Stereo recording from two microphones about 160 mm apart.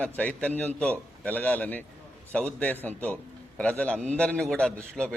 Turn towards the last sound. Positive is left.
turn(degrees=5)  # may be behind; listen again after turning